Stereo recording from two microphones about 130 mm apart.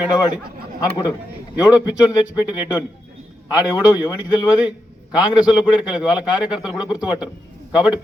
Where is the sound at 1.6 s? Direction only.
30° left (ahead or behind).